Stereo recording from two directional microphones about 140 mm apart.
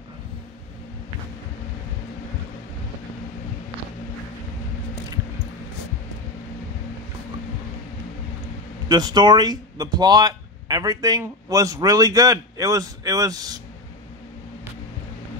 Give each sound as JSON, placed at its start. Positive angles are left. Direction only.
{"t": 8.8, "sound": "speech", "side_deg": -30}